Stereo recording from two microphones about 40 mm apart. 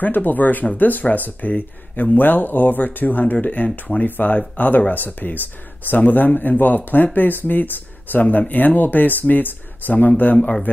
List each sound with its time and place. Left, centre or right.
0.0 s speech: left